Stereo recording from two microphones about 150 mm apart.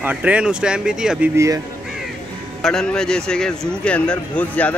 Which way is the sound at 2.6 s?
5° left (ahead or behind).